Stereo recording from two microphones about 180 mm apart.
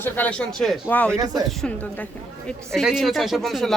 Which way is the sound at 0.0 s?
10° left (ahead or behind).